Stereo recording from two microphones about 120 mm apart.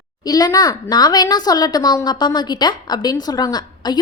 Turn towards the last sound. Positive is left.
turn(degrees=35)  # may be behind; listen again after turning